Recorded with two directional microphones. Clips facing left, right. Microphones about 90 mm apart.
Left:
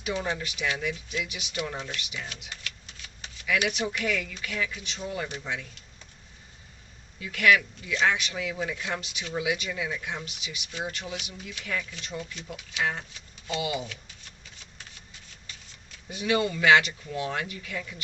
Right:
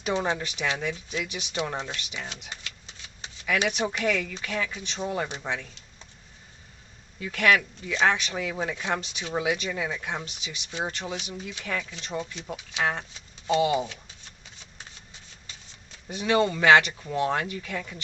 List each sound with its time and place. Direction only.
0.0 s speech: 30° right (ahead or behind)
7.2 s speech: 35° right (ahead or behind)
11.8 s speech: 25° right (ahead or behind)
13.5 s speech: 35° right (ahead or behind)
16.0 s speech: 35° right (ahead or behind)